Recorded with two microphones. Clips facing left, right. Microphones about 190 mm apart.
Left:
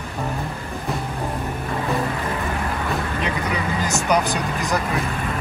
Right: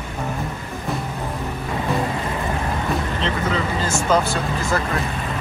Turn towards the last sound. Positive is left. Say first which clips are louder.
# right 1 dB
turn(degrees=15)  # may be behind; listen again after turning